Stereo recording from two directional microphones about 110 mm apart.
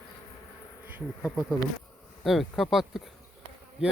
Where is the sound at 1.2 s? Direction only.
10° right (ahead or behind).